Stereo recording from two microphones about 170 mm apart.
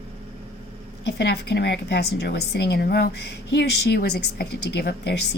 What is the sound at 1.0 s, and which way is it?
Speech, 85° left.